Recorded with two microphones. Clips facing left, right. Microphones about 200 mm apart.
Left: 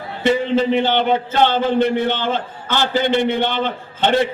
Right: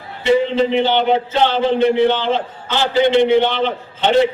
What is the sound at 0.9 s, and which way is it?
Speech, 50° left (ahead or behind).